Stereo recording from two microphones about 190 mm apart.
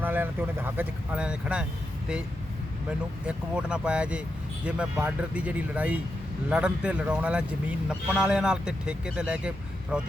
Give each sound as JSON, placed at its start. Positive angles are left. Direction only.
{"t": 0.0, "sound": "speech", "side_deg": -10}
{"t": 3.2, "sound": "speech", "side_deg": -5}